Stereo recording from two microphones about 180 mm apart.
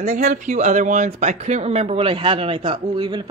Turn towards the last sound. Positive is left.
turn(degrees=-25)  # may be behind; listen again after turning